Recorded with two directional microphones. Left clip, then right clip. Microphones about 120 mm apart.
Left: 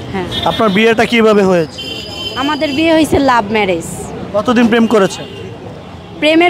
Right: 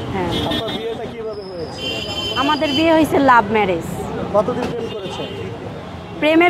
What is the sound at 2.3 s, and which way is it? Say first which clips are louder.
A woman's voice: left 2 dB; 50° left (ahead or behind).